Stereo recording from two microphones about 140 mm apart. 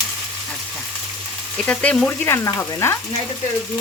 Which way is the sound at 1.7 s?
10° left (ahead or behind).